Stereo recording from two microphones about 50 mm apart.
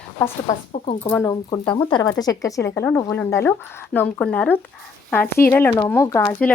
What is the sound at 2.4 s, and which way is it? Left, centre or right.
Speech, left.